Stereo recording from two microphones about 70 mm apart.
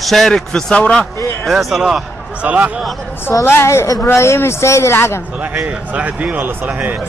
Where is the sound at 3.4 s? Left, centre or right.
Left.